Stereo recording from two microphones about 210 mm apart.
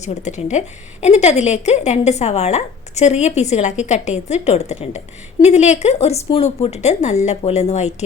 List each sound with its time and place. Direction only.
0.0 s speech: 35° left (ahead or behind)